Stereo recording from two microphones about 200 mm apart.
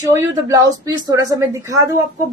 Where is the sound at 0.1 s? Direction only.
15° right (ahead or behind).